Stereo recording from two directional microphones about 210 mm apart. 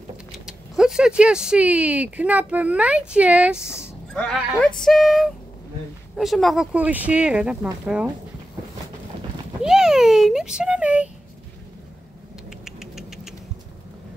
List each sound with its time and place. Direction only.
0.5 s speech: centre (ahead or behind)
9.6 s a child's voice: 5° right (ahead or behind)
12.4 s vehicle: centre (ahead or behind)